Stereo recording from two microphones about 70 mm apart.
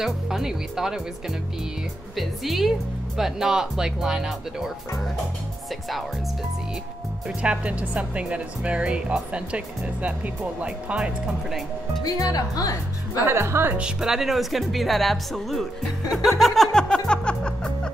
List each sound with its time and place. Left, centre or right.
0.0 s speech: centre
2.1 s speech: centre
7.2 s speech: centre
12.0 s speech: left
13.2 s a woman's voice: right
13.7 s speech: centre
16.7 s music: centre